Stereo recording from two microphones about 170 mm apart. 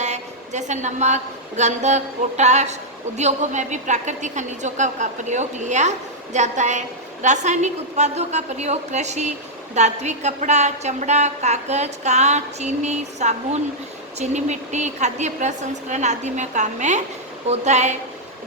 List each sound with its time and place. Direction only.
0.0 s a woman's voice: 45° right (ahead or behind)